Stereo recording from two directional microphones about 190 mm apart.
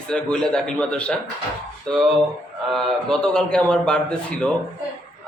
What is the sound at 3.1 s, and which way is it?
A man's voice, 5° left (ahead or behind).